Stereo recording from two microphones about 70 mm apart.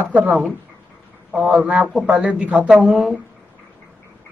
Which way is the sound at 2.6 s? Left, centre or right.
Centre.